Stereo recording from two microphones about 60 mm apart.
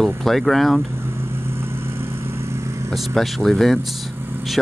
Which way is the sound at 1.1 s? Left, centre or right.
Right.